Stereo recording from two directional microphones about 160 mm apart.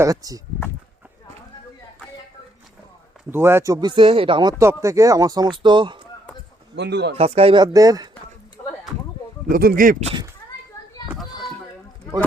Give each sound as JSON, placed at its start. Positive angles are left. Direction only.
{"t": 0.0, "sound": "speech", "side_deg": -20}
{"t": 3.3, "sound": "speech", "side_deg": -15}
{"t": 4.5, "sound": "speech", "side_deg": -15}
{"t": 6.7, "sound": "speech", "side_deg": -90}
{"t": 7.2, "sound": "speech", "side_deg": -40}
{"t": 8.6, "sound": "a sound", "side_deg": 30}
{"t": 9.5, "sound": "speech", "side_deg": -65}